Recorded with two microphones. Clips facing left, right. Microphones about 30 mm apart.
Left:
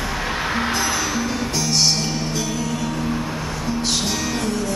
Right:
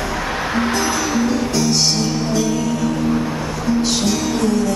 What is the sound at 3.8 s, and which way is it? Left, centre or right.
Music, centre.